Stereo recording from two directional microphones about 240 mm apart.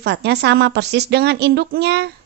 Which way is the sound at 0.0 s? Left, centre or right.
Right.